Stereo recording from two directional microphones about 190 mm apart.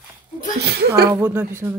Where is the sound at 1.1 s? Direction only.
10° right (ahead or behind).